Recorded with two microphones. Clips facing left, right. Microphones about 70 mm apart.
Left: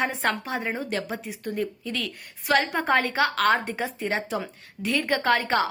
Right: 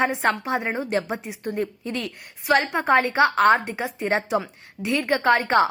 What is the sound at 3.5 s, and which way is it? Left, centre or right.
Speech, centre.